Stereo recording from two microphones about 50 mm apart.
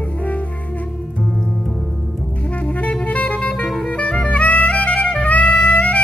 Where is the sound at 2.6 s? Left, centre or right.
Left.